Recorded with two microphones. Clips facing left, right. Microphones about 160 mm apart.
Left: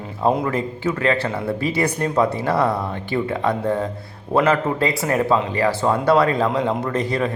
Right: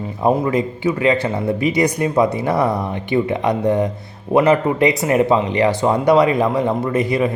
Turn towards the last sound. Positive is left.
turn(degrees=-10)  # may be behind; listen again after turning